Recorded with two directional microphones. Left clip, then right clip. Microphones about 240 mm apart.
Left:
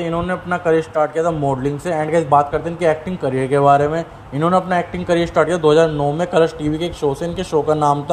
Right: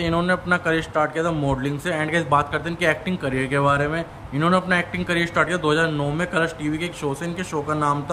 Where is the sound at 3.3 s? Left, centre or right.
Centre.